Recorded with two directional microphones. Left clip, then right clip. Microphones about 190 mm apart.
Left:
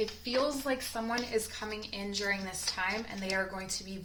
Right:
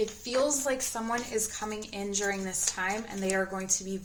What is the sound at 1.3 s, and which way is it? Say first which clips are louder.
Speech: right 1 dB; 40° right (ahead or behind).